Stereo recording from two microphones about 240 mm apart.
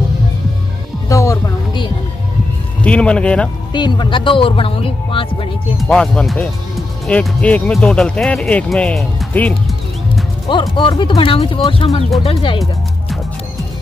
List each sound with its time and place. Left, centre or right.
1.0 s a sound: centre
2.8 s speech: centre
3.7 s speech: centre
5.8 s speech: centre
10.5 s speech: left